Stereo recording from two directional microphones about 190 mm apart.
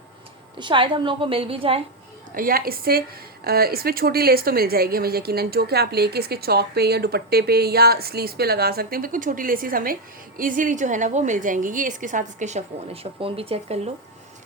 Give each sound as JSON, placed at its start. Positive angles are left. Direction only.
{"t": 0.6, "sound": "a woman's voice", "side_deg": -25}
{"t": 2.3, "sound": "a woman's voice", "side_deg": -50}